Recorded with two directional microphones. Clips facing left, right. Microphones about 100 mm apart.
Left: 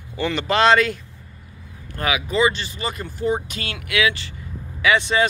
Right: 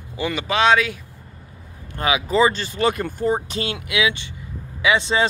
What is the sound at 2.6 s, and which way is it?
Speech, 55° right (ahead or behind).